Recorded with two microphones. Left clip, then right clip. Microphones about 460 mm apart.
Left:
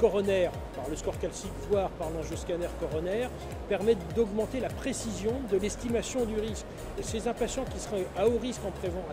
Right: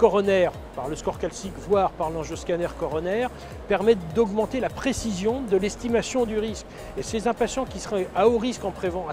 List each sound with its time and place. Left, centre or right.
0.0 s speech: right